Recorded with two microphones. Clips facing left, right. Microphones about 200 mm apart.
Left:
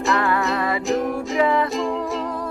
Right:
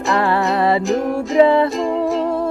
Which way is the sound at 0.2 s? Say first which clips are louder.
Right 5 dB; 30° right (ahead or behind).